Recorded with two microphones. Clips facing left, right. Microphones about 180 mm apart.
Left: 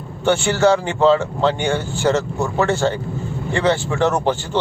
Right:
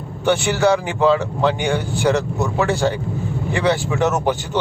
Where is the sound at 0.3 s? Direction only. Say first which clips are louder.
Left 1 dB; 15° right (ahead or behind).